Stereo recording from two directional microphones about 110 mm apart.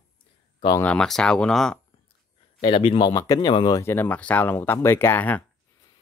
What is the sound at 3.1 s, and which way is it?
Speech, 30° left (ahead or behind).